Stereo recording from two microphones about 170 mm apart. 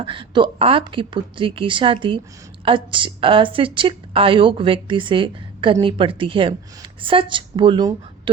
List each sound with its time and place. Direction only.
0.0 s a woman's voice: 30° right (ahead or behind)